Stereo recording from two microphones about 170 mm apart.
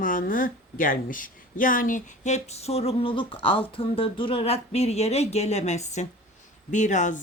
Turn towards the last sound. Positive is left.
turn(degrees=45)  # may be behind; listen again after turning